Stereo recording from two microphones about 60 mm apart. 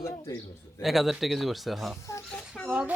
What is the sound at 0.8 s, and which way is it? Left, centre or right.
Speech, centre.